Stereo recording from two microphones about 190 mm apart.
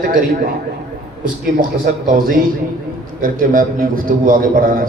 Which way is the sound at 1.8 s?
50° right (ahead or behind).